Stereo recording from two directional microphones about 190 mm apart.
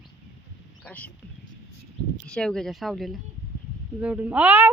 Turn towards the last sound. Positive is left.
turn(degrees=-10)  # may be behind; listen again after turning